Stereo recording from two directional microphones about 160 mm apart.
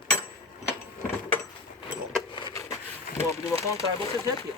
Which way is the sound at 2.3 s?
30° left (ahead or behind).